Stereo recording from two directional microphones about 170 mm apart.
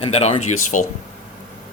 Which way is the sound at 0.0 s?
40° left (ahead or behind).